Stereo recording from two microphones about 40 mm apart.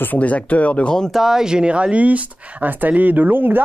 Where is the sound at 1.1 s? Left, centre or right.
Centre.